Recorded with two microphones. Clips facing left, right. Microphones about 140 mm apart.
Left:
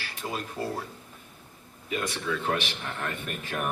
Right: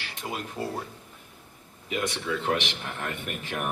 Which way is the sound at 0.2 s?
5° right (ahead or behind).